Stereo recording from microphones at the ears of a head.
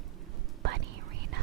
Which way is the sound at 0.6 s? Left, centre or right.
Right.